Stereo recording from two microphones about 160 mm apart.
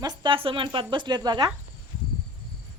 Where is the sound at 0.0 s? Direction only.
25° right (ahead or behind).